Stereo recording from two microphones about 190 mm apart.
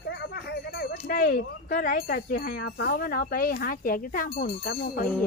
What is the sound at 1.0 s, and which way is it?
Speech, 45° left (ahead or behind).